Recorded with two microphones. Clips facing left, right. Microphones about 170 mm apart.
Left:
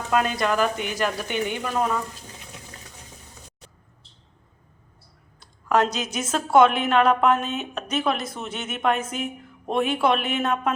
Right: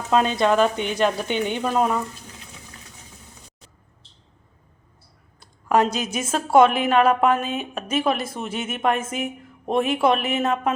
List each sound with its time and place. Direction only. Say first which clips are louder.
0.1 s a woman's voice: right 4 dB; 25° right (ahead or behind)
5.7 s a woman's voice: right 2 dB; 10° right (ahead or behind)